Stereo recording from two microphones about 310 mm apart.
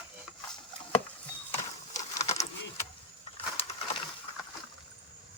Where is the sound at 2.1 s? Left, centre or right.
Left.